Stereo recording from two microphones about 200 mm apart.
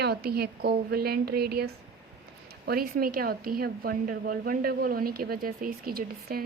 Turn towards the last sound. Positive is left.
turn(degrees=-50)  # may be behind; listen again after turning